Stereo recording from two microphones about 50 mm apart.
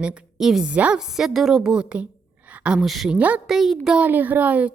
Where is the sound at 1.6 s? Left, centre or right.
Centre.